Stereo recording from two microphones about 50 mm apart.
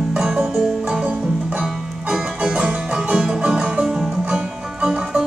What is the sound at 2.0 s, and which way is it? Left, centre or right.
Music, centre.